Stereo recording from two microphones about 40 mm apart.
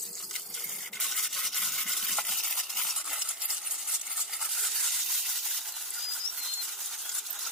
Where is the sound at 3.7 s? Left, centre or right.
Centre.